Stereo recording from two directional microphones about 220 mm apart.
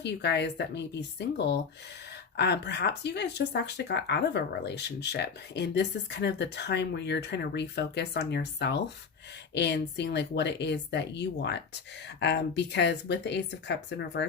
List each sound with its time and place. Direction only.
0.0 s speech: 50° left (ahead or behind)
2.3 s speech: 50° left (ahead or behind)